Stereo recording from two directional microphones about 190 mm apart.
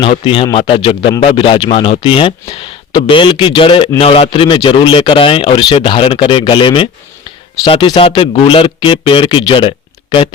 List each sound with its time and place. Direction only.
0.0 s speech: 30° left (ahead or behind)